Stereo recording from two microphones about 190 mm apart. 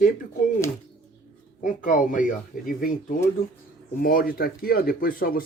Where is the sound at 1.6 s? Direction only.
45° left (ahead or behind).